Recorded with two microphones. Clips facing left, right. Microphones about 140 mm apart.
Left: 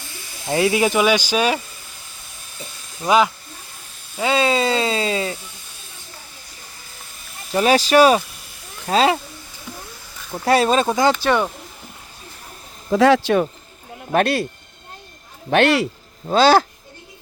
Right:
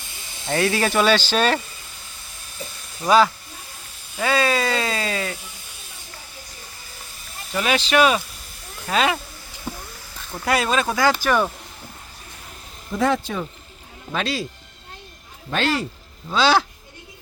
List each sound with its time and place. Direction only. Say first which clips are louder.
0.4 s speech: left 3 dB; 20° left (ahead or behind)
4.2 s speech: left 2 dB; 20° left (ahead or behind)
7.5 s speech: left 5 dB; 35° left (ahead or behind)
10.4 s speech: left 5 dB; 30° left (ahead or behind)
12.9 s speech: left 7 dB; 85° left
14.1 s a man's voice: left 8 dB; 60° left (ahead or behind)
15.4 s a man's voice: left 7 dB; 65° left (ahead or behind)
16.2 s speech: left 5 dB; 45° left (ahead or behind)